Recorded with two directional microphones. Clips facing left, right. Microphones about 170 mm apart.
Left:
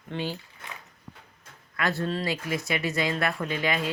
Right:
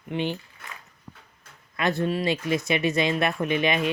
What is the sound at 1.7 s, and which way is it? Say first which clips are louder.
Speech: right 3 dB; 20° right (ahead or behind).